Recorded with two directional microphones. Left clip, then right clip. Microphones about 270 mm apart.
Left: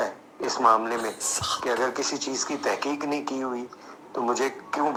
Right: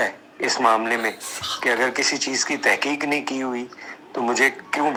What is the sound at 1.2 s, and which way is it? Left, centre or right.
Speech, left.